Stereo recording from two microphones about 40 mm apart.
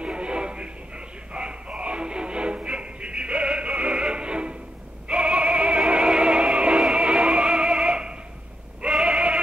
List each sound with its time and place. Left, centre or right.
0.0 s music: right
5.0 s synthetic singing: right
5.9 s music: right
9.0 s a sound: right